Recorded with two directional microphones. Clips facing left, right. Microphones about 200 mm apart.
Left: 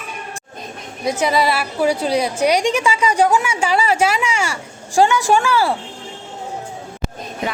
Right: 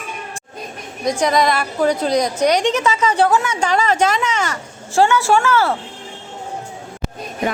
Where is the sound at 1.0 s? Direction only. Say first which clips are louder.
Right 1 dB; 5° left (ahead or behind).